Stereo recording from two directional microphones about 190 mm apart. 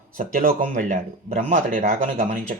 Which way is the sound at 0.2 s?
50° right (ahead or behind).